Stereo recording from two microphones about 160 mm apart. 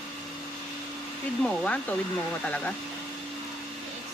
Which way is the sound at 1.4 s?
5° left (ahead or behind).